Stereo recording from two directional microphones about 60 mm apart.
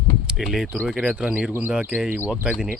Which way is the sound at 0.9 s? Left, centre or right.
Centre.